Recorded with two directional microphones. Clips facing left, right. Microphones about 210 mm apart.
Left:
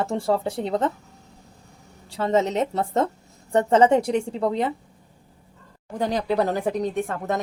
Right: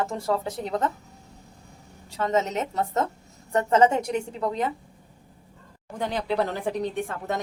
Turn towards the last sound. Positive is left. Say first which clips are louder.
# left 4 dB
turn(degrees=45)  # may be behind; listen again after turning